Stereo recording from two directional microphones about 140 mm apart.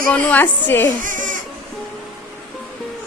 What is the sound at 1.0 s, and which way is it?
Sheep, 70° right (ahead or behind).